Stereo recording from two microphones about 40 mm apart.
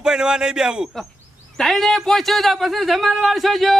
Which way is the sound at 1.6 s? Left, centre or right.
Centre.